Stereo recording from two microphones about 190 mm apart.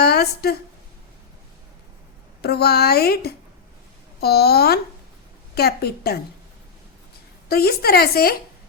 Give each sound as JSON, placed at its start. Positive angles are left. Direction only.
{"t": 0.0, "sound": "a sound", "side_deg": 55}
{"t": 2.4, "sound": "a child's voice", "side_deg": 55}
{"t": 7.4, "sound": "a child's voice", "side_deg": 55}